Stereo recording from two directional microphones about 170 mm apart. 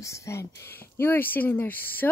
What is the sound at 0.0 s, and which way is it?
Speech, 20° left (ahead or behind).